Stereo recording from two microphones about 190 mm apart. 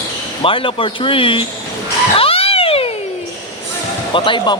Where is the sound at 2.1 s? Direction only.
30° left (ahead or behind).